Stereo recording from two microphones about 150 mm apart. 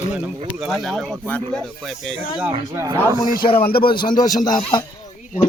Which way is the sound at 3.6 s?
85° left.